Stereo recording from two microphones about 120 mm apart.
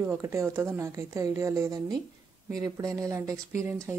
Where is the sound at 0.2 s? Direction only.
20° right (ahead or behind).